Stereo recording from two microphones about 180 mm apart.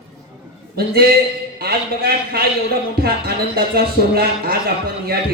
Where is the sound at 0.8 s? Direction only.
60° right (ahead or behind).